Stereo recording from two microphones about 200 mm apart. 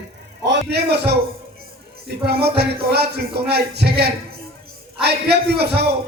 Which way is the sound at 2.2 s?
55° right (ahead or behind).